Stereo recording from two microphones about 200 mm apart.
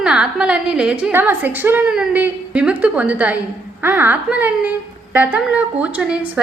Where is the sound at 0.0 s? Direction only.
5° right (ahead or behind).